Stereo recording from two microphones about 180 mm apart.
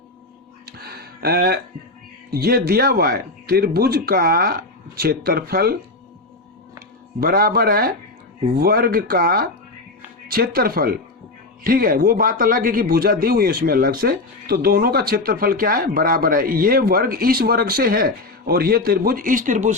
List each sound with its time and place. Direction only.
0.6 s music: 60° right (ahead or behind)
2.3 s a man's voice: 60° right (ahead or behind)
7.2 s a man's voice: 55° right (ahead or behind)